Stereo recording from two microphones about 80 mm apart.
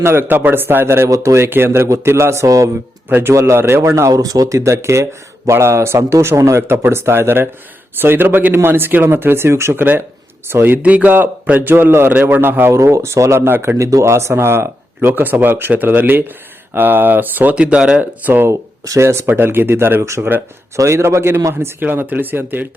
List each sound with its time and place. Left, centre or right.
0.0 s speech: right
3.1 s a man's voice: right
4.1 s a man's voice: right
10.8 s a man's voice: centre
18.0 s a man's voice: right
18.4 s a man's voice: right